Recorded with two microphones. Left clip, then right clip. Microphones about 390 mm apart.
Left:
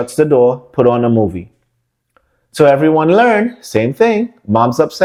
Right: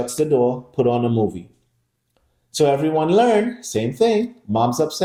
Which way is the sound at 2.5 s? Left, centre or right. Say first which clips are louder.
Left 8 dB; left.